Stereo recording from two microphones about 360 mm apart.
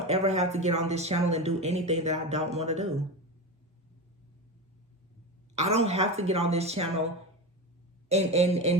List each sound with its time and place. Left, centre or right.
0.1 s speech: centre
5.5 s speech: centre
8.1 s speech: centre